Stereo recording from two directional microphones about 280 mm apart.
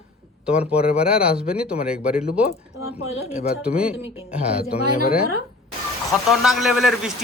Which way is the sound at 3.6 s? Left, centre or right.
Centre.